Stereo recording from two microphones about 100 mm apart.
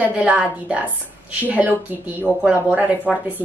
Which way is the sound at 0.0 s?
15° right (ahead or behind).